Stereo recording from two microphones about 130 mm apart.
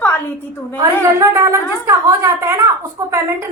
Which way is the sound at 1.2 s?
25° right (ahead or behind).